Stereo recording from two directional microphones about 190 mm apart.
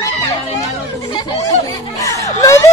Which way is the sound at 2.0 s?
15° left (ahead or behind).